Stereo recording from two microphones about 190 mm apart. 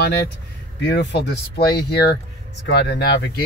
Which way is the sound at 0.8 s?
65° left (ahead or behind).